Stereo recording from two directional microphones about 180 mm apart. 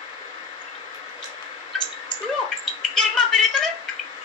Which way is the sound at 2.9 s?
5° left (ahead or behind).